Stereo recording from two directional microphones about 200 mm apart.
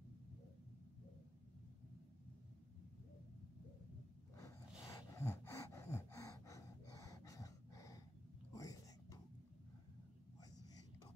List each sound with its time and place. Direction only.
4.4 s gasp: 15° left (ahead or behind)
8.5 s whispering: 15° left (ahead or behind)